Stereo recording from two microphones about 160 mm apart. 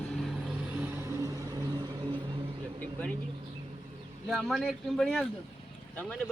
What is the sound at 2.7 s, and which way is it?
Vehicle, 5° left (ahead or behind).